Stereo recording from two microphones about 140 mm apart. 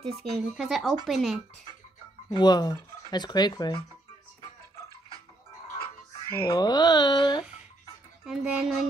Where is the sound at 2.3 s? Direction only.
30° left (ahead or behind).